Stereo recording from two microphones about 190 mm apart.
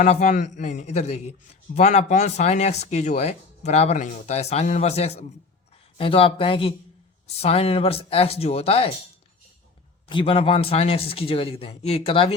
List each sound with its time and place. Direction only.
0.0 s a man's voice: 40° left (ahead or behind)
10.1 s a man's voice: 25° left (ahead or behind)